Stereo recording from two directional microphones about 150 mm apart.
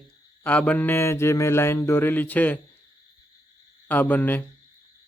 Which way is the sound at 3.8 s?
10° left (ahead or behind).